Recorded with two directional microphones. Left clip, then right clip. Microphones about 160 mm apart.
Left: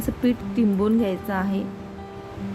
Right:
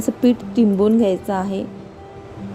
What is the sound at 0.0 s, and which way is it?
A woman's voice, 20° right (ahead or behind).